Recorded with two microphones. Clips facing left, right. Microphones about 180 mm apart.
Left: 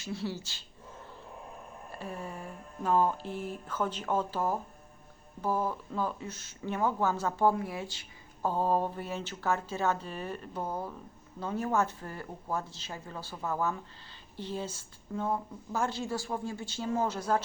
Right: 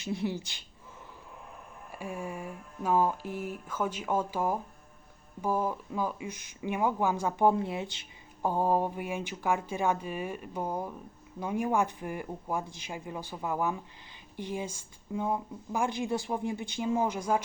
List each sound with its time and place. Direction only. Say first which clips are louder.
0.0 s speech: right 3 dB; 20° right (ahead or behind)
1.9 s speech: right 3 dB; 10° right (ahead or behind)